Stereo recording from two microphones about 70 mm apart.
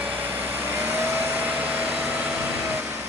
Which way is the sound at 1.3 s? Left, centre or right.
Right.